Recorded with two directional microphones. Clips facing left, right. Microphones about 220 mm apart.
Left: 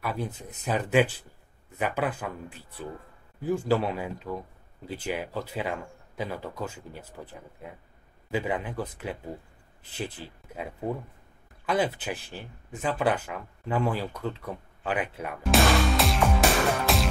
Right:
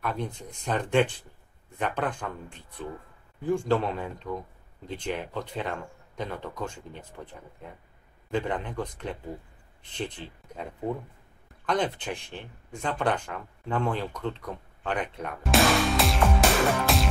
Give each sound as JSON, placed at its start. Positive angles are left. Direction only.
{"t": 0.0, "sound": "speech", "side_deg": 5}